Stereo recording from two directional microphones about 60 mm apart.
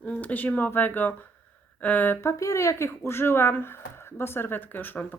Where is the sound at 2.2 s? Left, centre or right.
Left.